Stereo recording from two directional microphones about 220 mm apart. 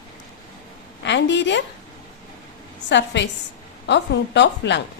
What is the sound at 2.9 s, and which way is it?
A woman's voice, 55° left (ahead or behind).